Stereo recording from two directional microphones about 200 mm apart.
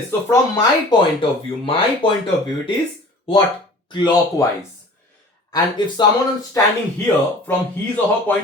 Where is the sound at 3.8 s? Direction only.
20° left (ahead or behind).